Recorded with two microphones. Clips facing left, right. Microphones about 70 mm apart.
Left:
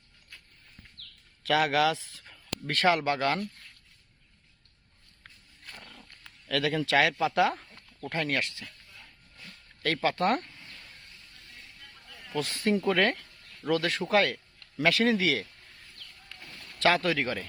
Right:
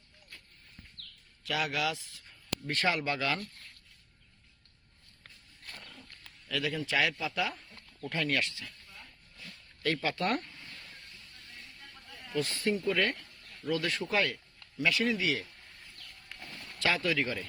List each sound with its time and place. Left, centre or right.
1.5 s speech: left
6.5 s speech: left
7.0 s speech: left
8.1 s speech: left
9.8 s speech: left
12.6 s speech: left
13.7 s speech: left
14.1 s speech: left
14.8 s speech: left
16.8 s speech: left